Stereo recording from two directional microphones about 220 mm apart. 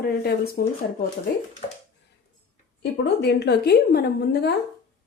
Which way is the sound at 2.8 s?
50° left (ahead or behind).